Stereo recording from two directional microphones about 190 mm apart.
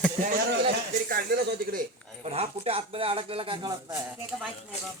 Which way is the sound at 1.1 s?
60° right (ahead or behind).